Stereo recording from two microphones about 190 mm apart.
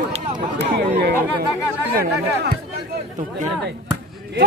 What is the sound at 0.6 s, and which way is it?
Speech, 55° right (ahead or behind).